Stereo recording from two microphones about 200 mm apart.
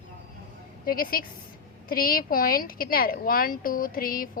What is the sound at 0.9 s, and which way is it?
A woman's voice, 45° left (ahead or behind).